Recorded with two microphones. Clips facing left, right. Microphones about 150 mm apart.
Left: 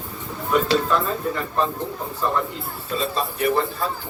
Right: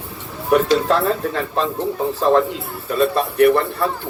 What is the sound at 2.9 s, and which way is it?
Speech, 60° right (ahead or behind).